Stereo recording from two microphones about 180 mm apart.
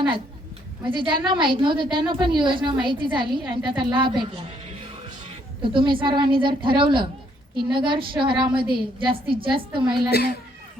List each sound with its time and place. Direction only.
0.9 s a woman's voice: 25° right (ahead or behind)
5.6 s a woman's voice: 25° right (ahead or behind)
10.1 s a child's voice: 65° left (ahead or behind)